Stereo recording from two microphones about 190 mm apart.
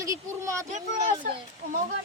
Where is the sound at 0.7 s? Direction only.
40° right (ahead or behind).